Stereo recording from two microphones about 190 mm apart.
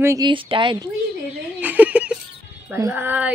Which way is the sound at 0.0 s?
20° right (ahead or behind).